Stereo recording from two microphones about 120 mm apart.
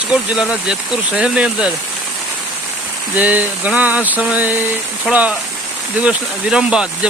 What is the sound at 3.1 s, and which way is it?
Speech, 15° right (ahead or behind).